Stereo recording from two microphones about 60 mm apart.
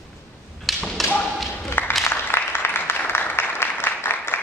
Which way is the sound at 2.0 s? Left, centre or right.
Left.